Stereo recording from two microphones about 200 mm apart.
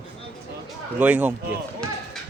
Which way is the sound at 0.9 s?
10° right (ahead or behind).